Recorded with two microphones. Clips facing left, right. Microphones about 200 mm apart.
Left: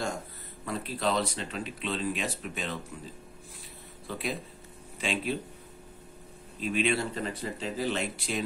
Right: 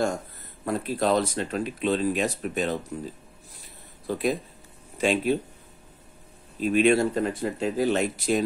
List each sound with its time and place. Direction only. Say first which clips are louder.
0.7 s speech: right 6 dB; 45° right (ahead or behind)
4.1 s speech: right 8 dB; 45° right (ahead or behind)
6.6 s speech: right 8 dB; 45° right (ahead or behind)